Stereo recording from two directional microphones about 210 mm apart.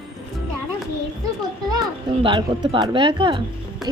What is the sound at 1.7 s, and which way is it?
A woman's voice, 20° right (ahead or behind).